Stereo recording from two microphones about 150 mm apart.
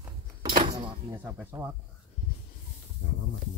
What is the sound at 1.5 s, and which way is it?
Speech, 25° right (ahead or behind).